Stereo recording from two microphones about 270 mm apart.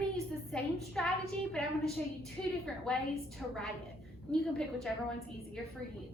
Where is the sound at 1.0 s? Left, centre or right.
Centre.